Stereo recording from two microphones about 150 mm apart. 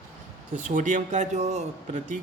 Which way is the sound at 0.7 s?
55° right (ahead or behind).